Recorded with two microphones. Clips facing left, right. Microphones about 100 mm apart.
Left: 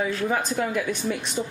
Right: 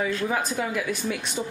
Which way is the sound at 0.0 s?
Centre (ahead or behind).